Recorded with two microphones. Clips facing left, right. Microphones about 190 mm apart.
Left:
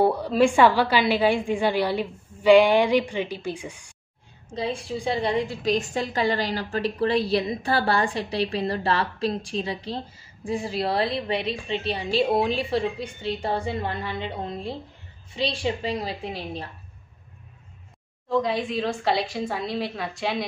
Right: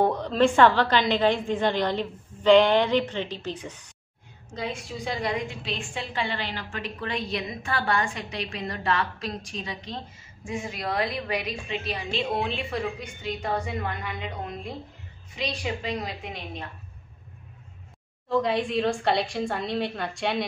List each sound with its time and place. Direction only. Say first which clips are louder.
0.0 s a woman's voice: left 2 dB; 10° left (ahead or behind)
4.6 s a woman's voice: left 4 dB; 30° left (ahead or behind)
18.3 s a woman's voice: even; centre (ahead or behind)